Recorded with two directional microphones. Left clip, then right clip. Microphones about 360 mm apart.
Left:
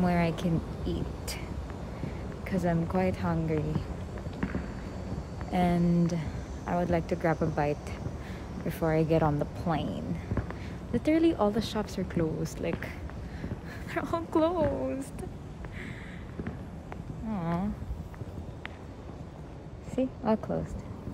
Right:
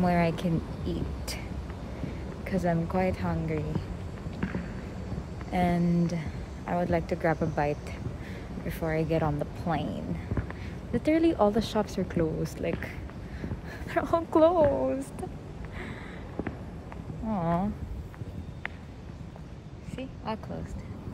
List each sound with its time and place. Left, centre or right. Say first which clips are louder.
0.0 s speech: right 2 dB; centre
2.4 s speech: right 2 dB; centre
5.5 s a woman's voice: even; centre
17.3 s speech: right 5 dB; centre
20.3 s a woman's voice: left 5 dB; left